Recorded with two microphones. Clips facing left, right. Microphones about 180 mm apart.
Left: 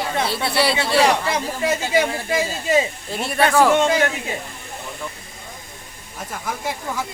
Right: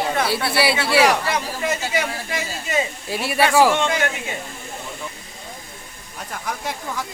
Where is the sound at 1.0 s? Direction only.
25° left (ahead or behind).